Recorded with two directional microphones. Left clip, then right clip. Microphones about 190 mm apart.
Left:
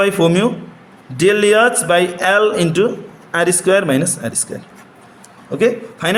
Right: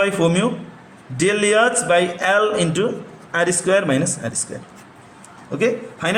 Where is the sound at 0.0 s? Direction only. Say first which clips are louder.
Left 4 dB; 25° left (ahead or behind).